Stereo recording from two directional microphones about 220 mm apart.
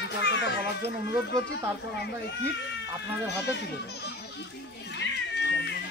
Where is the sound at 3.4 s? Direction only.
50° left (ahead or behind).